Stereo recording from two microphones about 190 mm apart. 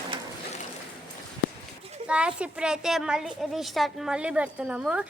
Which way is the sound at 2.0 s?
5° right (ahead or behind).